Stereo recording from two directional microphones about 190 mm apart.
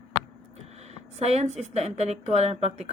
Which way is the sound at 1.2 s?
35° right (ahead or behind).